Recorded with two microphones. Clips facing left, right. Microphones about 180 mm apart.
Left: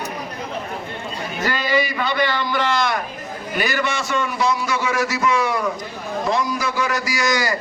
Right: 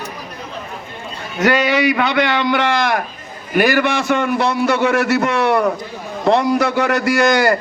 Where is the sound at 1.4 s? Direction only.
75° right (ahead or behind); by 3.0 s 60° right (ahead or behind).